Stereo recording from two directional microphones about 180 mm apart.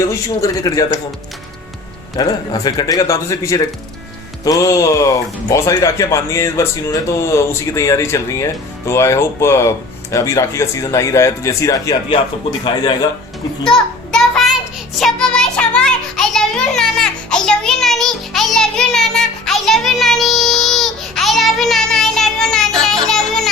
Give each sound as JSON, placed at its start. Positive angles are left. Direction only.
{"t": 0.0, "sound": "speech", "side_deg": 15}
{"t": 2.1, "sound": "speech", "side_deg": 20}
{"t": 13.7, "sound": "a sound", "side_deg": 5}
{"t": 14.9, "sound": "music", "side_deg": 5}